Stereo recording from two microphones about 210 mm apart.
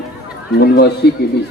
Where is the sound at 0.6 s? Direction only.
55° left (ahead or behind).